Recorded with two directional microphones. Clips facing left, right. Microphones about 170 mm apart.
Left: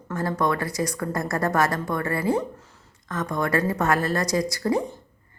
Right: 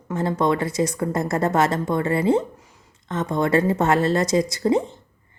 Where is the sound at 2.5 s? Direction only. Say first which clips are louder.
Left 1 dB; 15° right (ahead or behind).